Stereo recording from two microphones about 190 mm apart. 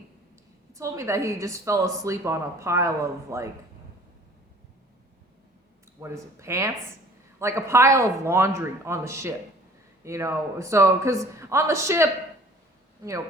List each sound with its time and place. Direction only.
0.7 s a woman's voice: 15° right (ahead or behind)
6.0 s a woman's voice: 15° right (ahead or behind)